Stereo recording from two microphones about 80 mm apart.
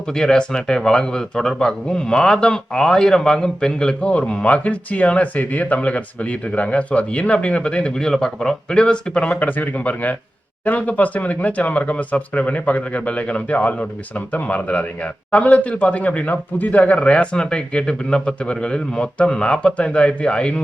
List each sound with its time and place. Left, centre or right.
0.1 s a man's voice: centre